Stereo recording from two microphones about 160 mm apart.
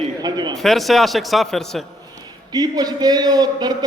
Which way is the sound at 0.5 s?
Centre (ahead or behind).